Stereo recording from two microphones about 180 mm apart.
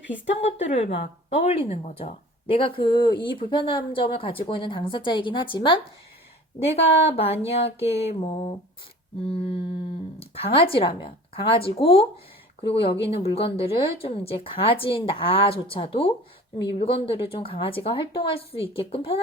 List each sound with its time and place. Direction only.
0.4 s a woman's voice: 40° left (ahead or behind)